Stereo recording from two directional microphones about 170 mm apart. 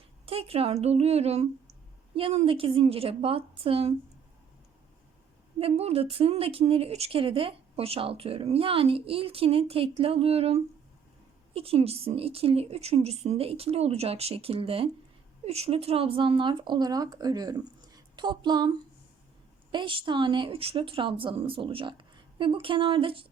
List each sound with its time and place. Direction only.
0.3 s speech: 35° right (ahead or behind)
5.5 s speech: 35° right (ahead or behind)
19.7 s speech: 30° right (ahead or behind)